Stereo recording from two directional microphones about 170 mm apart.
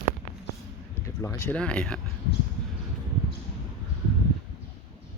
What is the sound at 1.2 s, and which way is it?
Speech, 15° left (ahead or behind).